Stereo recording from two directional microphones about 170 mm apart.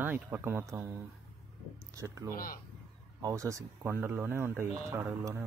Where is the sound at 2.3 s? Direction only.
55° left (ahead or behind).